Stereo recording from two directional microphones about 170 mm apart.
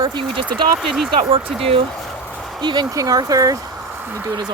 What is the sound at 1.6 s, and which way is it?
Speech, 35° right (ahead or behind).